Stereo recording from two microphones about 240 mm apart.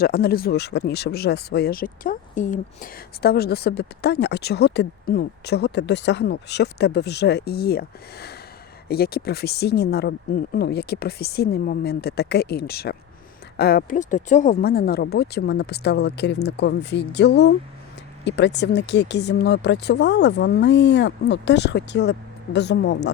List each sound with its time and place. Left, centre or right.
0.0 s speech: left